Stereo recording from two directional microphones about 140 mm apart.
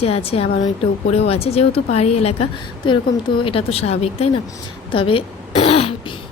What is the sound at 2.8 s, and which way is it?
A woman's voice, 35° left (ahead or behind).